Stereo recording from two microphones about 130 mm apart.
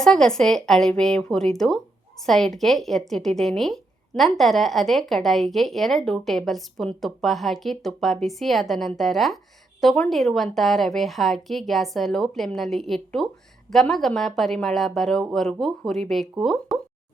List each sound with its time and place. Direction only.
0.0 s speech: 5° left (ahead or behind)